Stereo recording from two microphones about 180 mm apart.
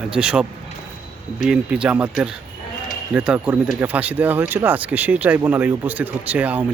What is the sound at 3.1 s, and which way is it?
Speech, 5° right (ahead or behind).